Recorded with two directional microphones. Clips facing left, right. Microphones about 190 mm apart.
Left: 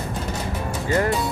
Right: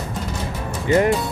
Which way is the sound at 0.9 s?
20° right (ahead or behind).